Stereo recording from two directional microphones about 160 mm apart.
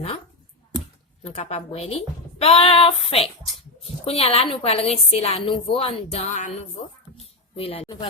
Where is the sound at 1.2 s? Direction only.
40° left (ahead or behind).